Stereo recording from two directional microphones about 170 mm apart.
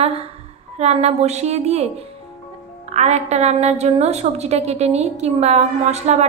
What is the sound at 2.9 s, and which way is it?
A woman's voice, 40° right (ahead or behind).